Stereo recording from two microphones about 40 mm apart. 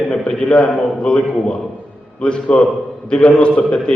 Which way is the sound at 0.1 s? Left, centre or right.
Left.